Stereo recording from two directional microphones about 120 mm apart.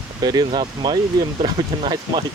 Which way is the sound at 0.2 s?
35° right (ahead or behind).